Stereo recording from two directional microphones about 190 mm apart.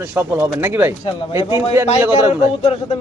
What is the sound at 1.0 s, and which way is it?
Speech, 25° left (ahead or behind).